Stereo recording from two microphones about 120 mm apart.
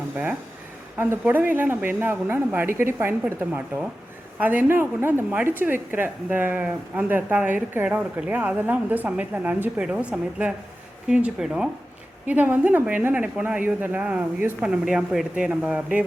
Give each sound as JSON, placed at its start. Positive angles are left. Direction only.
{"t": 1.2, "sound": "a woman's voice", "side_deg": -15}